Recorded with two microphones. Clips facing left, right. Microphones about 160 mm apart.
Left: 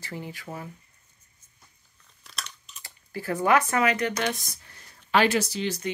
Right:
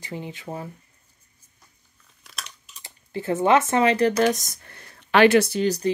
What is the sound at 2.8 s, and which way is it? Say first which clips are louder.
Speech: right 5 dB; 20° right (ahead or behind).